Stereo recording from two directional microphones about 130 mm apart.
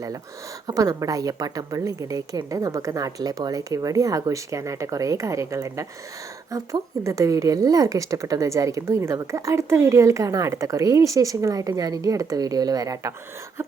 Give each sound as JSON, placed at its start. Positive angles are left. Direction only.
{"t": 0.7, "sound": "a woman's voice", "side_deg": -25}